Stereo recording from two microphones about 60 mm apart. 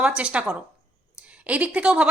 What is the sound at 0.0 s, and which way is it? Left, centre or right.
A woman's voice, centre.